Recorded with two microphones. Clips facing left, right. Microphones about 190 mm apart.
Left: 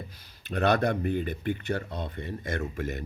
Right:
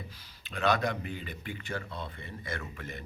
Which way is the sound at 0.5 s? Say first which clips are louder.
Left 5 dB; 60° left (ahead or behind).